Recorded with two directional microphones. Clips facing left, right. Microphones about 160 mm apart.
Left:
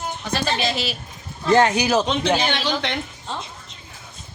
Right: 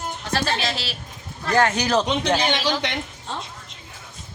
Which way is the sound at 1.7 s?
10° left (ahead or behind).